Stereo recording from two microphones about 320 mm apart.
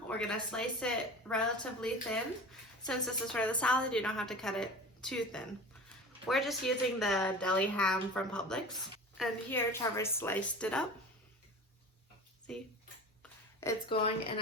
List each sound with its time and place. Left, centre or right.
0.1 s a woman's voice: centre
12.5 s a woman's voice: centre
13.6 s a woman's voice: centre